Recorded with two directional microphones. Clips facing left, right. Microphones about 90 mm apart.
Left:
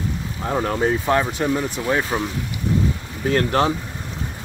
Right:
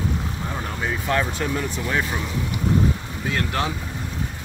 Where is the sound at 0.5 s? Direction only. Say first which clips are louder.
Left 8 dB; 60° left (ahead or behind).